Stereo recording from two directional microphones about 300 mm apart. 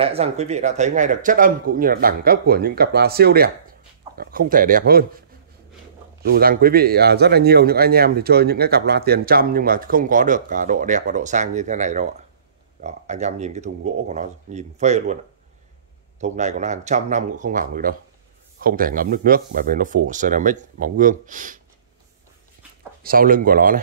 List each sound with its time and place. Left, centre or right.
0.0 s speech: centre
6.2 s speech: right
16.2 s speech: right
23.0 s speech: right